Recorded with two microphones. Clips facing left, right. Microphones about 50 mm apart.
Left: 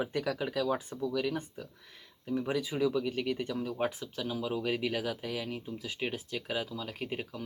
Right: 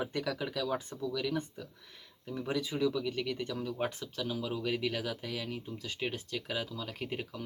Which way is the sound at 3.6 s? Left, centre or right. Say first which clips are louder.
Left 2 dB; centre.